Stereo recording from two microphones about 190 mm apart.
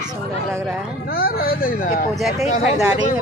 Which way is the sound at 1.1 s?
55° left (ahead or behind).